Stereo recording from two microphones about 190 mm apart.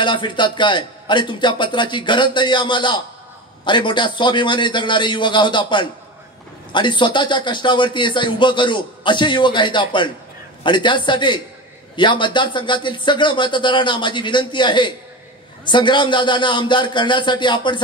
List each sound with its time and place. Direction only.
0.0 s a man's voice: 25° left (ahead or behind)